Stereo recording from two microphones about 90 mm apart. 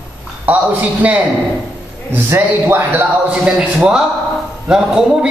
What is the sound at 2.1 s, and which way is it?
Speech, 25° right (ahead or behind).